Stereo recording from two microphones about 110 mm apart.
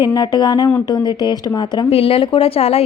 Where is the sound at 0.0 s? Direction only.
40° left (ahead or behind).